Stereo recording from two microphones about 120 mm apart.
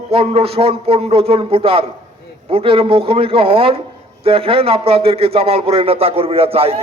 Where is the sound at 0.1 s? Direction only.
55° right (ahead or behind).